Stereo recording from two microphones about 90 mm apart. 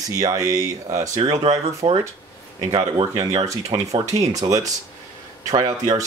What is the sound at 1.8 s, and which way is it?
Speech, 90° right.